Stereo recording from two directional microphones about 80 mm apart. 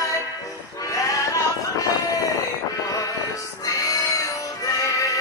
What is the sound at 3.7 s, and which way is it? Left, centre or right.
Music, left.